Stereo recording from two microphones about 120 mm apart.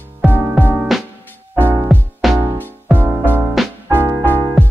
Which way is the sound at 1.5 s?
20° right (ahead or behind).